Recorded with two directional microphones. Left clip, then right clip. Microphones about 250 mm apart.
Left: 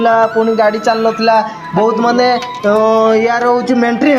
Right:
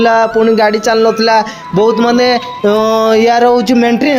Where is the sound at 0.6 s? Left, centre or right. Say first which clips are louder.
Right 2 dB; right.